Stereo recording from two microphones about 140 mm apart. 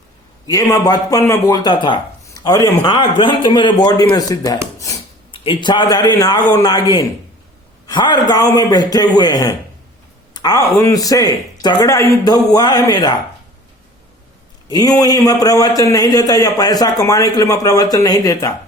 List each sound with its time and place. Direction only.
0.4 s a man's voice: 25° left (ahead or behind)
2.9 s a man's voice: 35° left (ahead or behind)
5.3 s a man's voice: 40° left (ahead or behind)
14.7 s a man's voice: 25° left (ahead or behind)